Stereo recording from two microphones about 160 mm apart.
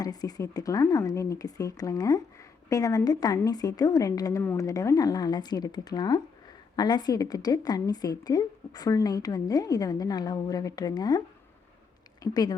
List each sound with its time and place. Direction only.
0.0 s a woman's voice: 25° left (ahead or behind)
12.2 s a woman's voice: 25° left (ahead or behind)